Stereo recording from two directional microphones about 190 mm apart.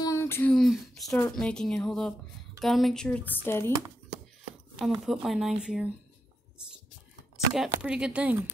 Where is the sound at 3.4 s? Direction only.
10° left (ahead or behind).